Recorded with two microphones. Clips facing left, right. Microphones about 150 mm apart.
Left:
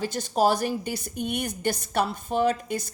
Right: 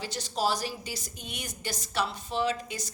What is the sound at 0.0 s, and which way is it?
A woman's voice, 50° left (ahead or behind).